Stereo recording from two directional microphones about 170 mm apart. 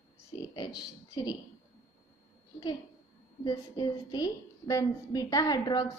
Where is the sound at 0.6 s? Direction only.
25° left (ahead or behind).